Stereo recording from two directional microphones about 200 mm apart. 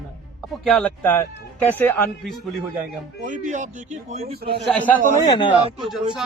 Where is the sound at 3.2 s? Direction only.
40° right (ahead or behind).